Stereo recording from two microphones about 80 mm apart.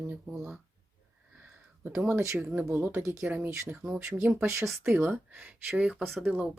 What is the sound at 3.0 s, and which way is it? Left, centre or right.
Speech, right.